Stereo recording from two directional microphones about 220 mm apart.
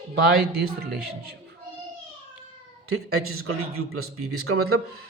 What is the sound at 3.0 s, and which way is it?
A man's voice, 75° right (ahead or behind).